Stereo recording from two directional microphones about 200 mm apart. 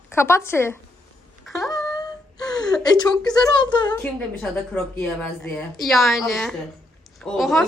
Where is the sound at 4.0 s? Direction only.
5° left (ahead or behind).